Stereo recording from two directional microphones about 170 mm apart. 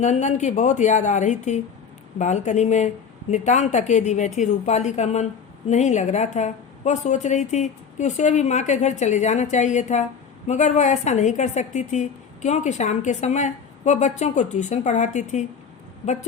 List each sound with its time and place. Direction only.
0.0 s a woman's voice: 45° left (ahead or behind)